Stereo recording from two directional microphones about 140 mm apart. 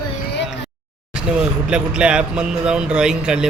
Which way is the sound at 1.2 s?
5° right (ahead or behind).